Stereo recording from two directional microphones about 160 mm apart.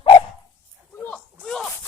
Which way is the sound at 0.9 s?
10° left (ahead or behind).